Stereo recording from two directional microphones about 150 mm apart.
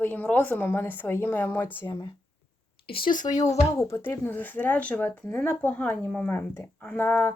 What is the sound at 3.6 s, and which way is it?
Speech, 15° left (ahead or behind).